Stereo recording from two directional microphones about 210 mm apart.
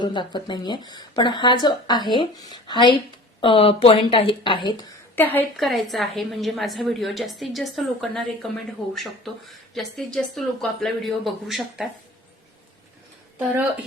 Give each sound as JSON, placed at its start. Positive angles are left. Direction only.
{"t": 0.0, "sound": "speech", "side_deg": 20}
{"t": 5.1, "sound": "a woman's voice", "side_deg": 10}